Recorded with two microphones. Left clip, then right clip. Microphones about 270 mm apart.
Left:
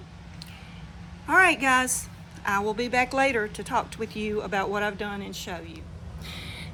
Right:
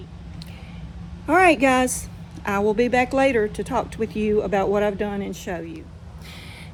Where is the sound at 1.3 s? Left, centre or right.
Centre.